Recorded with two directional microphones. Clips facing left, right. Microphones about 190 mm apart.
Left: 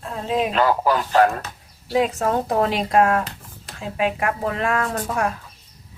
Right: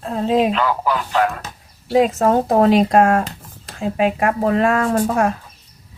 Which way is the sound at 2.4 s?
40° right (ahead or behind).